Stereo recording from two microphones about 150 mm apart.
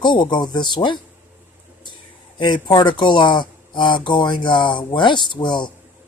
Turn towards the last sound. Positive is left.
turn(degrees=30)  # may be behind; listen again after turning